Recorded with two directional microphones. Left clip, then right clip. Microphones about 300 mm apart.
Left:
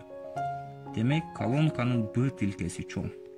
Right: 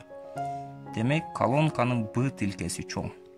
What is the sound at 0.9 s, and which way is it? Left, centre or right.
Speech, centre.